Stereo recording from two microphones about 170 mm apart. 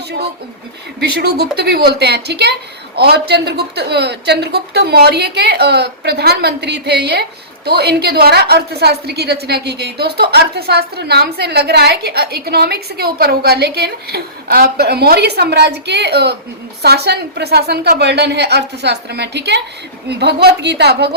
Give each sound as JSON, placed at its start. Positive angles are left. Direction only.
{"t": 0.9, "sound": "a woman's voice", "side_deg": -70}